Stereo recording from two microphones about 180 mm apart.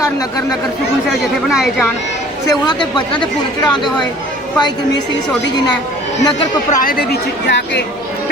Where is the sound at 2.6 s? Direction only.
25° left (ahead or behind).